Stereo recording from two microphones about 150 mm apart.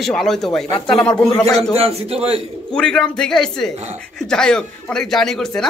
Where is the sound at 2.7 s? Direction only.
5° left (ahead or behind).